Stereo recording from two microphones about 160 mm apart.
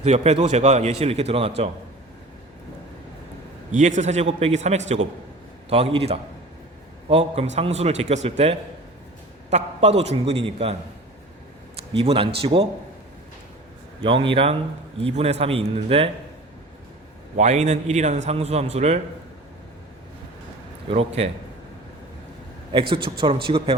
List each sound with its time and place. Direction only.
0.0 s a man's voice: 40° right (ahead or behind)
3.7 s a man's voice: 50° right (ahead or behind)
11.8 s a man's voice: 35° right (ahead or behind)
14.0 s a man's voice: 35° right (ahead or behind)
17.3 s a man's voice: 45° right (ahead or behind)
20.9 s a man's voice: 40° right (ahead or behind)
22.9 s a man's voice: 30° right (ahead or behind)